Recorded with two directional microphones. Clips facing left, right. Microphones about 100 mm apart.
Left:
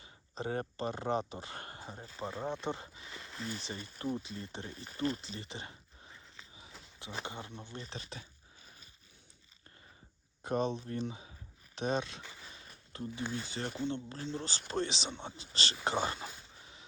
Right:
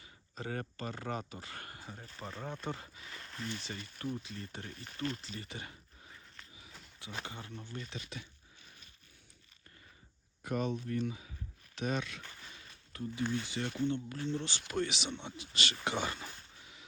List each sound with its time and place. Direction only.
0.0 s speech: 25° left (ahead or behind)
2.0 s speech: 15° left (ahead or behind)
3.2 s a sound: 5° left (ahead or behind)
3.6 s speech: 25° left (ahead or behind)
5.2 s a sound: 25° left (ahead or behind)
7.3 s speech: 20° left (ahead or behind)
7.9 s dog: 35° left (ahead or behind)
10.4 s speech: 25° left (ahead or behind)
12.2 s a sound: 10° left (ahead or behind)
12.5 s zipper: 30° left (ahead or behind)
13.3 s speech: 35° left (ahead or behind)